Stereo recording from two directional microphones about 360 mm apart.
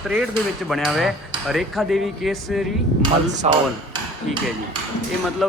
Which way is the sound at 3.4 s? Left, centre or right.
Centre.